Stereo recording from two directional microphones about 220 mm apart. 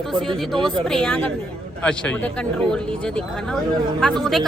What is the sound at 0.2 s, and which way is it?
Speech, centre (ahead or behind).